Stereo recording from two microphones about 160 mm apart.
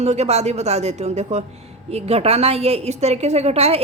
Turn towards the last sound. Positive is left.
turn(degrees=-40)  # may be behind; listen again after turning